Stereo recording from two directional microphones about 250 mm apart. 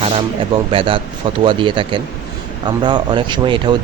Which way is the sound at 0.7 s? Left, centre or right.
Right.